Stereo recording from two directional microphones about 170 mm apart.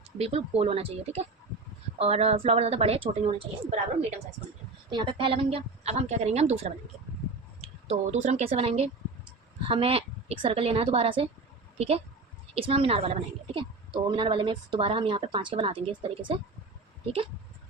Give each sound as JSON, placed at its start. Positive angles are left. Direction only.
{"t": 0.2, "sound": "a woman's voice", "side_deg": -35}
{"t": 4.9, "sound": "a woman's voice", "side_deg": -25}
{"t": 7.9, "sound": "a woman's voice", "side_deg": -45}